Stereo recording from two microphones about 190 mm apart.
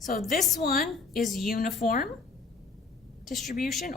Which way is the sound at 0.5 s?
45° left (ahead or behind).